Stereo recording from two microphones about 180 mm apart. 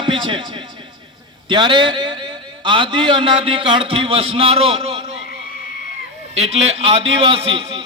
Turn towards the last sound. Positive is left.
turn(degrees=-30)  # may be behind; listen again after turning